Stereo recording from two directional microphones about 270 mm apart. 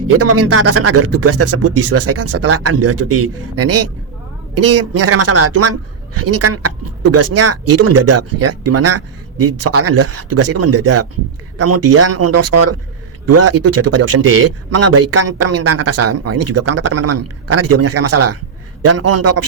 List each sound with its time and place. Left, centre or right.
0.2 s speech: right